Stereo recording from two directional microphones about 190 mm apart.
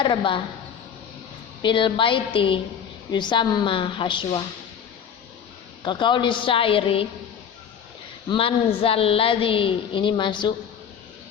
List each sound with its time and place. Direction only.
0.0 s a woman's voice: 25° left (ahead or behind)
1.6 s a woman's voice: 25° left (ahead or behind)
5.8 s a woman's voice: 25° left (ahead or behind)
8.3 s a woman's voice: 30° left (ahead or behind)